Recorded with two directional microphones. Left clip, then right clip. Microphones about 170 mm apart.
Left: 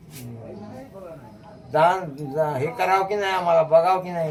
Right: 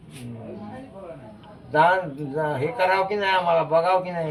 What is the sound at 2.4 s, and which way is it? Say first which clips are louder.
A man's voice: even; 15° left (ahead or behind).